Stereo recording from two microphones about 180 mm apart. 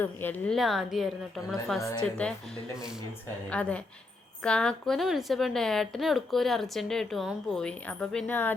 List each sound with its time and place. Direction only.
0.0 s a woman's voice: 10° left (ahead or behind)
1.8 s a woman's voice: 20° left (ahead or behind)
3.5 s a woman's voice: 5° left (ahead or behind)